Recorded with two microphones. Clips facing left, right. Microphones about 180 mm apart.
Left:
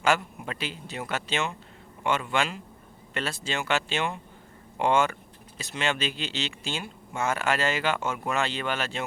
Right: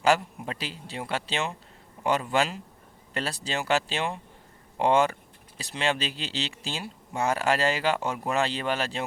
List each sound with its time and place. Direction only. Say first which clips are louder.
0.0 s speech: right 2 dB; 35° right (ahead or behind)